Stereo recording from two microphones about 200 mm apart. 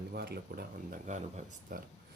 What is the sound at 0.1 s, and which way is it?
Speech, 50° right (ahead or behind).